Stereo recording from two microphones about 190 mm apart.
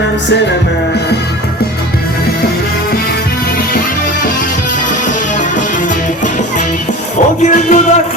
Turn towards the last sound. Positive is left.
turn(degrees=40)  # may be behind; listen again after turning